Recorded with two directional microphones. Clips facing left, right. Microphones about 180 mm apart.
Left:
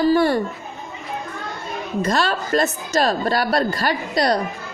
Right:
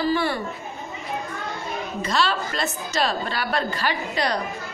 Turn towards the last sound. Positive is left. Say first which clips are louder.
# left 5 dB
turn(degrees=40)  # may be behind; listen again after turning